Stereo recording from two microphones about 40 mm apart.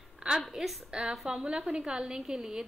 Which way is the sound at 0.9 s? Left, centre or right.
Right.